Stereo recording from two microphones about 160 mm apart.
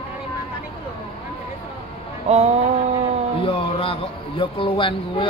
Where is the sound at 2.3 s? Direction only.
40° right (ahead or behind).